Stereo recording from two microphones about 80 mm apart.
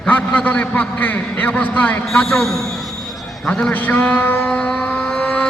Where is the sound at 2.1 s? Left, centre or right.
Centre.